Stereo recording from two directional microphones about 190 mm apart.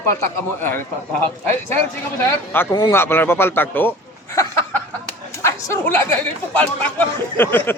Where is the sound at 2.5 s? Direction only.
10° left (ahead or behind).